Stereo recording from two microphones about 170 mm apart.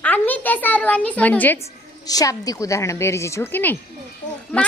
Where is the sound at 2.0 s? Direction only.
20° left (ahead or behind).